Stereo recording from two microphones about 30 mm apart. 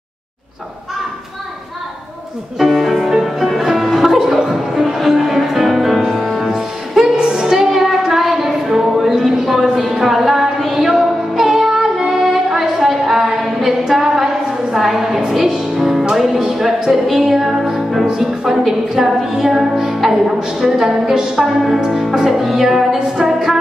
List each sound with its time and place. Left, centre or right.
2.7 s music: centre
3.1 s music: centre
7.3 s music: centre
9.2 s a sound: centre
11.3 s child singing: centre
12.1 s music: centre
20.0 s a woman's voice: centre
21.4 s music: centre
22.9 s music: right